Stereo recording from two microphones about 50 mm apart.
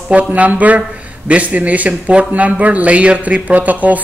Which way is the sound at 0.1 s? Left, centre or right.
Right.